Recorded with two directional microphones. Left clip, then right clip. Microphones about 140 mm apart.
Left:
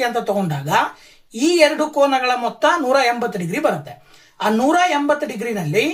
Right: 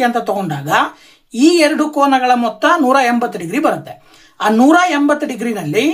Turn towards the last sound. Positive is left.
turn(degrees=-40)  # may be behind; listen again after turning